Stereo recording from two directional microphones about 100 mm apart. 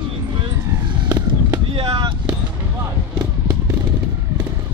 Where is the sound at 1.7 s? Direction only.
60° right (ahead or behind).